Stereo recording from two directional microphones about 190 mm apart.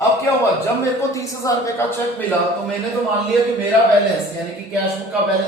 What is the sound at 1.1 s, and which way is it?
Speech, 15° left (ahead or behind).